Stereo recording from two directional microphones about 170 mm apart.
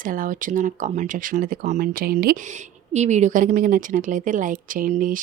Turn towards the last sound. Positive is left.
turn(degrees=-50)  # may be behind; listen again after turning